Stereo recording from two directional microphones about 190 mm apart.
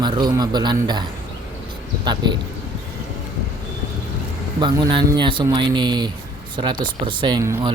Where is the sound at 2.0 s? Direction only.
25° right (ahead or behind).